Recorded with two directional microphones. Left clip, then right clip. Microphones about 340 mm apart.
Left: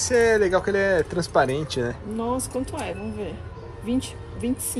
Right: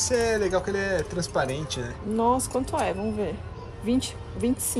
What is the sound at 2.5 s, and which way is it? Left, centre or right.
Speech, right.